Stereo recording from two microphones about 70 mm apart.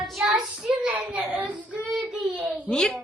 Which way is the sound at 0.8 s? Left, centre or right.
Centre.